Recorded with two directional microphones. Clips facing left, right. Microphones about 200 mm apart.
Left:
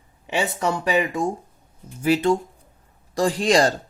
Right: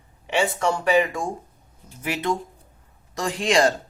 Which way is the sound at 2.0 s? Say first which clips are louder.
Left 7 dB; 30° left (ahead or behind).